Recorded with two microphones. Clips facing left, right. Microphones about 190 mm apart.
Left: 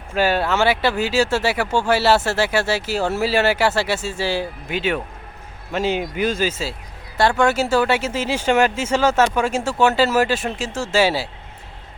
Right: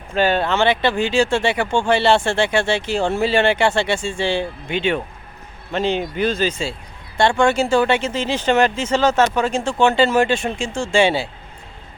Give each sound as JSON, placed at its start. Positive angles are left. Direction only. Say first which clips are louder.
{"t": 0.1, "sound": "speech", "louder": "right 1 dB", "side_deg": 5}